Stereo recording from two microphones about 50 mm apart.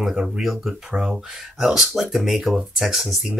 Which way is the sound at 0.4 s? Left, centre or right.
Centre.